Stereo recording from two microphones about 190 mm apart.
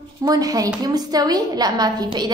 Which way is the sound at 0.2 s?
20° right (ahead or behind).